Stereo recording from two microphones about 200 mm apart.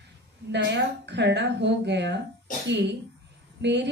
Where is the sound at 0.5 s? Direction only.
60° right (ahead or behind).